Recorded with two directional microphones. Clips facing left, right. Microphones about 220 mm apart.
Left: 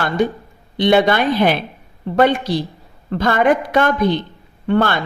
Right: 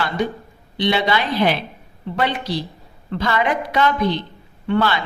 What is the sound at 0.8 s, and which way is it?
A woman's voice, 50° left (ahead or behind).